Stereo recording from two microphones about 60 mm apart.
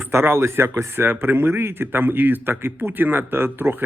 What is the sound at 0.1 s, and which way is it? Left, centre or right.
A man's voice, right.